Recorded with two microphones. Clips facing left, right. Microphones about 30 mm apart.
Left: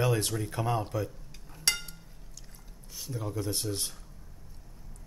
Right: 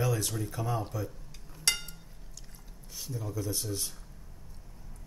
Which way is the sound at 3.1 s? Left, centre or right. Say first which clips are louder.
Left 2 dB; left.